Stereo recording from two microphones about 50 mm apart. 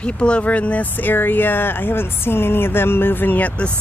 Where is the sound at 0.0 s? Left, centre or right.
Left.